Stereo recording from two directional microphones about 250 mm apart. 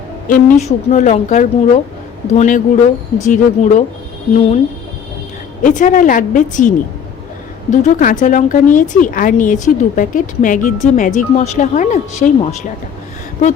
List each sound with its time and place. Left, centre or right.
0.3 s speech: left
5.6 s speech: left